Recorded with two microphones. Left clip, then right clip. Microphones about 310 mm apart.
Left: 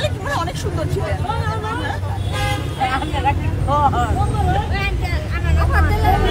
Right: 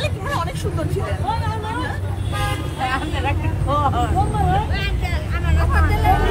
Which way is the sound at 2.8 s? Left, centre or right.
Centre.